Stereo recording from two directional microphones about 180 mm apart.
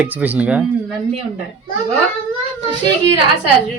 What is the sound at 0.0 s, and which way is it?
Speech, 10° right (ahead or behind).